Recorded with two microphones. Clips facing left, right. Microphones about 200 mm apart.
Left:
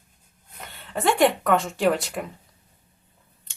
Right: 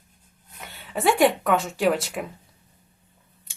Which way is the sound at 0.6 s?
5° right (ahead or behind).